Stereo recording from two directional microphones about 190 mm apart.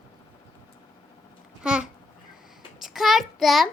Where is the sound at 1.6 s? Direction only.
5° right (ahead or behind).